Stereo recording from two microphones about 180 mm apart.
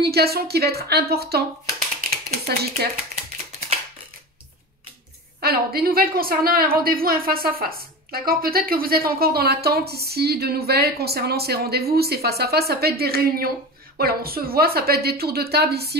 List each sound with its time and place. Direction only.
0.0 s a woman's voice: 60° right (ahead or behind)
5.4 s a woman's voice: 60° right (ahead or behind)